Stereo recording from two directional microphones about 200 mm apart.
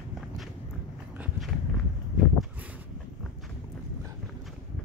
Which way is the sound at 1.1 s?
5° right (ahead or behind).